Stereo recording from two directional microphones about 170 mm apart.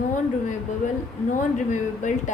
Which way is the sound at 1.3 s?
45° left (ahead or behind).